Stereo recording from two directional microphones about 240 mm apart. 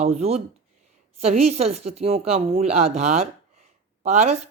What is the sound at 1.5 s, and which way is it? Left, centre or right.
A woman's voice, right.